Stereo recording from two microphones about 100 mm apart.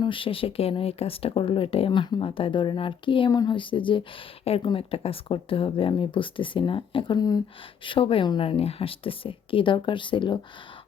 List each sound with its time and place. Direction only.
0.0 s speech: 60° left (ahead or behind)
1.9 s speech: 50° left (ahead or behind)
7.2 s speech: 40° left (ahead or behind)
7.9 s speech: 65° left (ahead or behind)